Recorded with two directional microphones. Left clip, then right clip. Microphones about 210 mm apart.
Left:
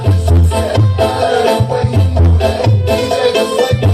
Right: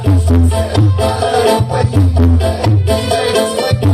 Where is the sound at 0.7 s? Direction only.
20° right (ahead or behind).